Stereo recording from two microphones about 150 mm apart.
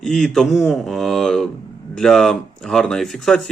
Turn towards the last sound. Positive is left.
turn(degrees=5)  # may be behind; listen again after turning